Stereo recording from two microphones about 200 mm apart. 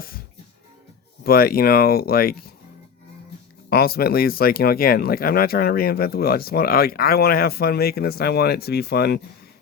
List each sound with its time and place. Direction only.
1.2 s speech: 50° left (ahead or behind)
3.7 s speech: 50° left (ahead or behind)